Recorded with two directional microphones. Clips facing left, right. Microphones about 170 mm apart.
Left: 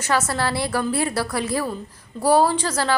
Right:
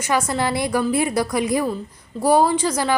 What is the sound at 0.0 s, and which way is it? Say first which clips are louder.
A woman's voice: right 1 dB; 15° right (ahead or behind).